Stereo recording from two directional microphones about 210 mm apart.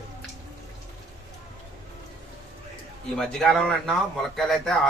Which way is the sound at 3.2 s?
5° left (ahead or behind).